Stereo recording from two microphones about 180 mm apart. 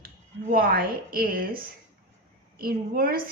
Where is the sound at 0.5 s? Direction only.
55° right (ahead or behind).